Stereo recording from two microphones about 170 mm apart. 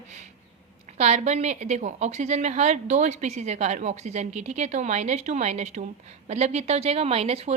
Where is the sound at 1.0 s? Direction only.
40° right (ahead or behind).